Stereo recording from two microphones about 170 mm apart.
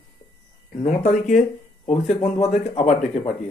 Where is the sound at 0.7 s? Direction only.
45° left (ahead or behind).